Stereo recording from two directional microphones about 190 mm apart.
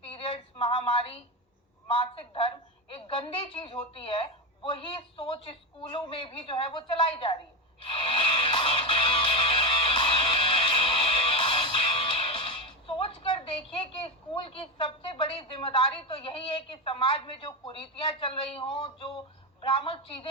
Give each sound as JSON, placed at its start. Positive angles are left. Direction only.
{"t": 0.0, "sound": "a sound", "side_deg": 30}
{"t": 1.9, "sound": "a woman's voice", "side_deg": 30}
{"t": 7.8, "sound": "music", "side_deg": 30}
{"t": 14.3, "sound": "a woman's voice", "side_deg": 30}